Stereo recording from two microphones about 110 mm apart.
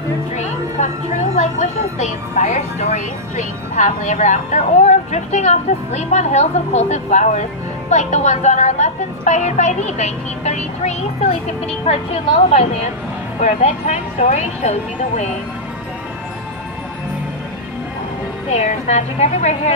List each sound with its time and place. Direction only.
2.0 s a woman's voice: 90° left
4.1 s a woman's voice: 90° left; by 12.9 s 70° left (ahead or behind)
13.4 s a woman's voice: 85° left
18.5 s a woman's voice: 90° left